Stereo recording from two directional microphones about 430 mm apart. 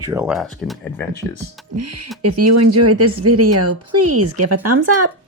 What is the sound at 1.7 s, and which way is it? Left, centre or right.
Speech, right.